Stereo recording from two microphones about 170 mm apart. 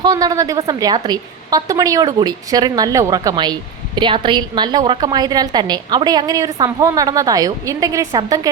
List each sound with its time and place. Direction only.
0.0 s a woman's voice: 20° right (ahead or behind)